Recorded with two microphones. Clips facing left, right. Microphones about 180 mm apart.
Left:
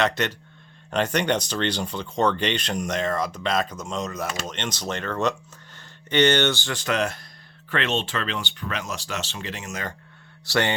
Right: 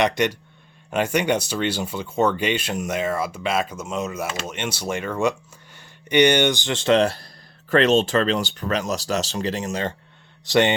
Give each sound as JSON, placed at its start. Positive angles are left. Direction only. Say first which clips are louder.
{"t": 0.0, "sound": "speech", "louder": "right 3 dB", "side_deg": -15}
{"t": 10.4, "sound": "speech", "louder": "right 5 dB", "side_deg": -20}